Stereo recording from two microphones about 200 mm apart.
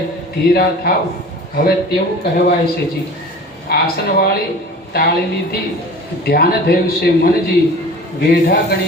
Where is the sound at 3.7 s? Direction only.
50° left (ahead or behind).